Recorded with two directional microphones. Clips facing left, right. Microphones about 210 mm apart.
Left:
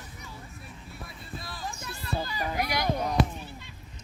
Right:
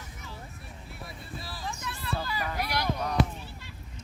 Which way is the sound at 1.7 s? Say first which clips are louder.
Right 3 dB; 40° left (ahead or behind).